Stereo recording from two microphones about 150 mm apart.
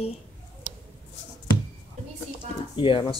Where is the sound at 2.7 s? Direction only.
30° left (ahead or behind).